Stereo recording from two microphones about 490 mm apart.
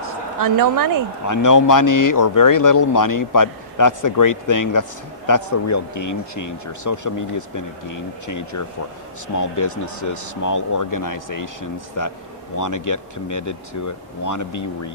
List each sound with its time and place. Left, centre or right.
0.3 s a woman's voice: right
1.3 s a man's voice: left